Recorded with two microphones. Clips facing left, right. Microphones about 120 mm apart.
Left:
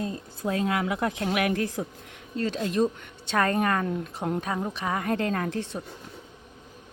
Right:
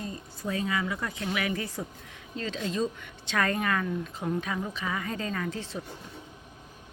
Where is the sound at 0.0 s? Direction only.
70° left (ahead or behind).